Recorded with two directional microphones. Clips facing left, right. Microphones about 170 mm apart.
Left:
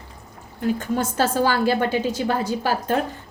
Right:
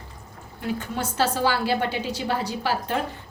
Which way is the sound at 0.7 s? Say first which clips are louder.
Even; 45° left (ahead or behind).